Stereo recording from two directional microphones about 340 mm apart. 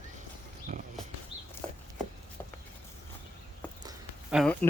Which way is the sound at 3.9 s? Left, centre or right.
Centre.